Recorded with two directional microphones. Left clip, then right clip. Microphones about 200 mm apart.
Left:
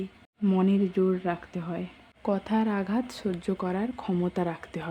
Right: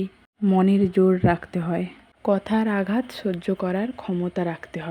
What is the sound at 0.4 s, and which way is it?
Speech, 20° right (ahead or behind).